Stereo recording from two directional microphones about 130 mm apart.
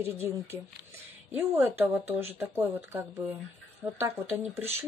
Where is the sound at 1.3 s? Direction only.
15° right (ahead or behind).